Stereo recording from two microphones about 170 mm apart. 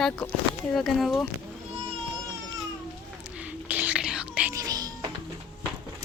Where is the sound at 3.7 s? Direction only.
5° right (ahead or behind).